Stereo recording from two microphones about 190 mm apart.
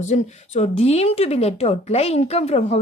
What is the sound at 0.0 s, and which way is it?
Speech, 35° left (ahead or behind).